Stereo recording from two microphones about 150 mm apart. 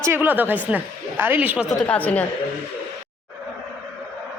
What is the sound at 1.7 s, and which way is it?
Speech, 10° left (ahead or behind).